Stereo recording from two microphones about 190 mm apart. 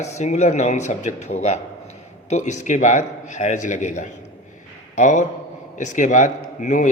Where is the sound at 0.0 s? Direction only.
40° left (ahead or behind).